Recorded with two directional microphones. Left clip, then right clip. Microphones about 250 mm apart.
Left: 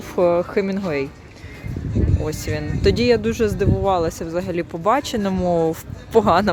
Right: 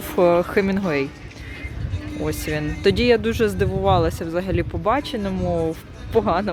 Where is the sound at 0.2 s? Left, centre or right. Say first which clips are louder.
Right 1 dB; centre.